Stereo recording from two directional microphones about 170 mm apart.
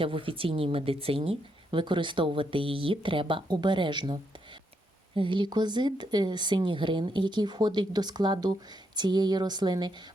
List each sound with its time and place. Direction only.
0.0 s speech: 30° right (ahead or behind)